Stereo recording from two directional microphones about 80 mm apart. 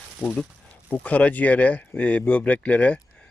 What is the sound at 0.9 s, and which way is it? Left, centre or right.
Speech, centre.